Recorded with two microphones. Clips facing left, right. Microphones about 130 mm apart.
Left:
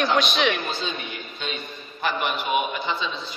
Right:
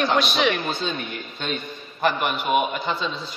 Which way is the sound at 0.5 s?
50° right (ahead or behind).